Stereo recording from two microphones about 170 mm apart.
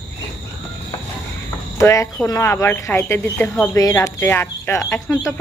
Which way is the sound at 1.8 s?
15° left (ahead or behind).